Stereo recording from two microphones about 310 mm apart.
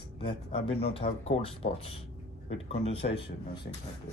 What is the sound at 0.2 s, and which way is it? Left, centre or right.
Speech, centre.